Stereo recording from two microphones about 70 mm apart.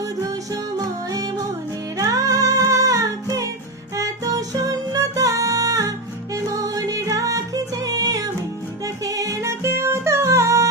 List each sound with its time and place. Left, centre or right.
0.0 s music: right